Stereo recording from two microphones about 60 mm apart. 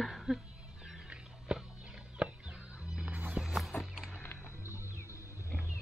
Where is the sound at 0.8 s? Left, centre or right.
Centre.